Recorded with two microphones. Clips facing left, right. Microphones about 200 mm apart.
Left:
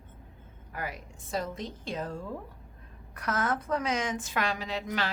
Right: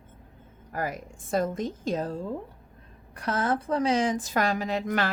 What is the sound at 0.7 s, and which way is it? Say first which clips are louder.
A woman's voice: right 6 dB; 45° right (ahead or behind).